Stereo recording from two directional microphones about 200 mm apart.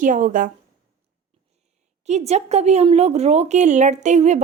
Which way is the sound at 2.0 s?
35° right (ahead or behind).